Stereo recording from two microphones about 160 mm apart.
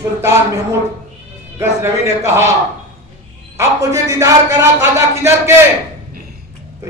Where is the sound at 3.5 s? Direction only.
20° right (ahead or behind).